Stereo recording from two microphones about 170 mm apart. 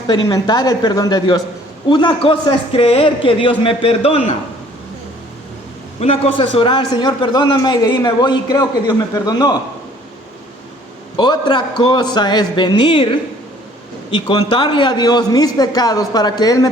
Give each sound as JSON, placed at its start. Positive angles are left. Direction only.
{"t": 0.1, "sound": "a man's voice", "side_deg": 25}
{"t": 6.0, "sound": "a man's voice", "side_deg": 35}
{"t": 11.2, "sound": "a man's voice", "side_deg": 25}